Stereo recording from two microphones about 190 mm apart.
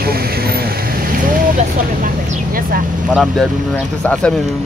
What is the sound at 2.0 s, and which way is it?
Speech, 50° right (ahead or behind).